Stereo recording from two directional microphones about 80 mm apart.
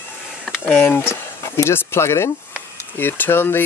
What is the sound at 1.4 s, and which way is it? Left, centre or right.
Speech, left.